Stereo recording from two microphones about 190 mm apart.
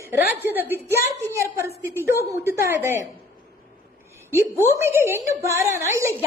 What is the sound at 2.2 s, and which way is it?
Speech, 15° right (ahead or behind).